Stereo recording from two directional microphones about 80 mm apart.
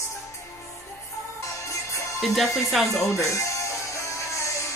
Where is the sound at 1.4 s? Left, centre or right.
Left.